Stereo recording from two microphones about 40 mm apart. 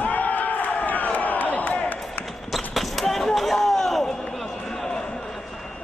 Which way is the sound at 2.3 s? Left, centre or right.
Centre.